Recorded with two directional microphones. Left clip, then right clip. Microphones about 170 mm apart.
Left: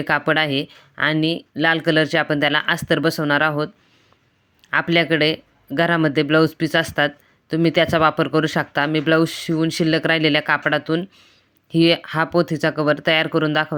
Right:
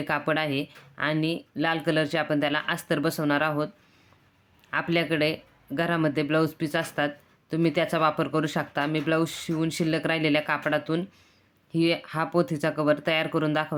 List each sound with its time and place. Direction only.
0.0 s speech: 30° left (ahead or behind)
4.7 s speech: 30° left (ahead or behind)